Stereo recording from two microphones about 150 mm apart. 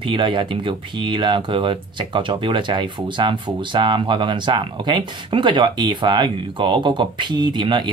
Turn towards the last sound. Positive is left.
turn(degrees=-30)  # may be behind; listen again after turning